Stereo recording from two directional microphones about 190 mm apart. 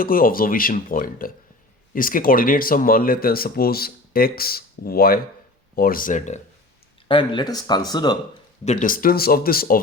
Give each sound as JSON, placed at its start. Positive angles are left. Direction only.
{"t": 0.0, "sound": "speech", "side_deg": 50}
{"t": 7.1, "sound": "speech", "side_deg": 25}
{"t": 8.6, "sound": "speech", "side_deg": 40}